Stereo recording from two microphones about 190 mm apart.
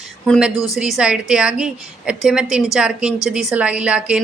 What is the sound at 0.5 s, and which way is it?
Speech, 15° left (ahead or behind).